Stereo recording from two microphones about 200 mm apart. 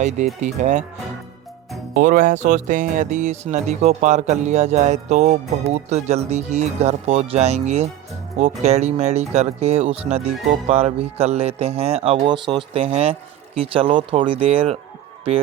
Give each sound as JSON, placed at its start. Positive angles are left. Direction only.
{"t": 0.0, "sound": "speech", "side_deg": -35}
{"t": 1.9, "sound": "speech", "side_deg": -45}